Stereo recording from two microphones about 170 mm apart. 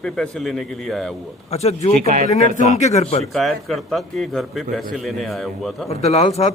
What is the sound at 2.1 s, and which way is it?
Speech, 50° right (ahead or behind).